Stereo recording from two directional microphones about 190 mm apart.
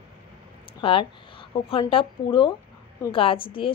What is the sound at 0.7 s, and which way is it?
Speech, 25° left (ahead or behind).